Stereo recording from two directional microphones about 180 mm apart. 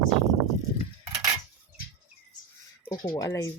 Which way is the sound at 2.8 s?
20° left (ahead or behind).